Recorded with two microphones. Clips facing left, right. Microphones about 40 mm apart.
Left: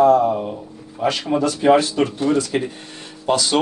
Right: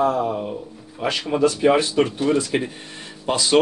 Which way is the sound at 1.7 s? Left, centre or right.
Centre.